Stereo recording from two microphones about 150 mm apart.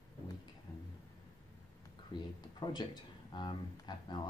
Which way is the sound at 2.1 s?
30° left (ahead or behind).